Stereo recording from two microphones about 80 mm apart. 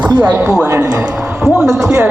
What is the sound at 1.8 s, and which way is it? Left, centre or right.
Speech, right.